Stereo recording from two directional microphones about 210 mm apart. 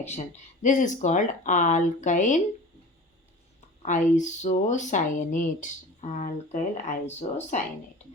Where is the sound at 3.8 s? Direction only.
35° left (ahead or behind).